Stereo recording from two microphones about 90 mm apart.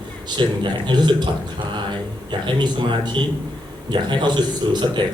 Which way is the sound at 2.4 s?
65° right (ahead or behind).